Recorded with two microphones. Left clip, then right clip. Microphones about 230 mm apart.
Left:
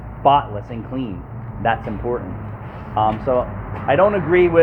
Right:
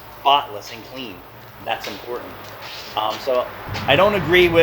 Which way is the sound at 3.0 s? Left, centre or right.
Right.